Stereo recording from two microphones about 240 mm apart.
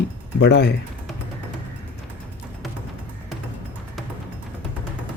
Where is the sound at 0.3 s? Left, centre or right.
Left.